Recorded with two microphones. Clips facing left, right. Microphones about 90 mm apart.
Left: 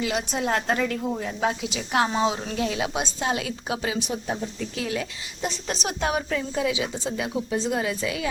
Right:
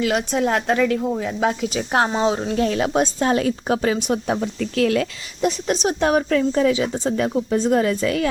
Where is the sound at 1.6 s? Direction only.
40° right (ahead or behind).